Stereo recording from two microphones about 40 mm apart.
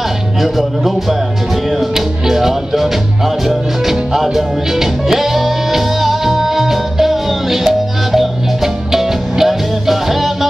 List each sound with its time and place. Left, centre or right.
0.4 s music: centre